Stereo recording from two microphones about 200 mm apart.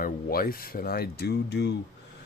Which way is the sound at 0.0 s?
45° left (ahead or behind).